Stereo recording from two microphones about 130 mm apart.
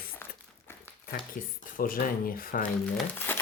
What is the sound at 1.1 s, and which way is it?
Speech, 90° left.